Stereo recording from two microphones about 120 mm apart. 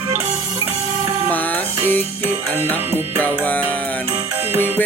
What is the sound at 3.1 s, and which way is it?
Music, 15° left (ahead or behind).